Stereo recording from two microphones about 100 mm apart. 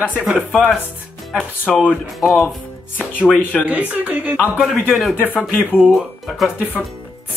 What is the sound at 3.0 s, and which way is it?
Speech, 15° left (ahead or behind).